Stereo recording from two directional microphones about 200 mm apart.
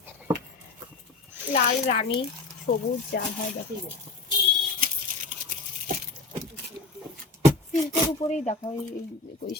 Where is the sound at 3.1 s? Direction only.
50° left (ahead or behind).